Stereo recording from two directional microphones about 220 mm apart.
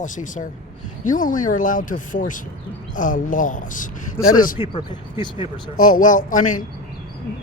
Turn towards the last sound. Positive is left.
turn(degrees=35)  # may be behind; listen again after turning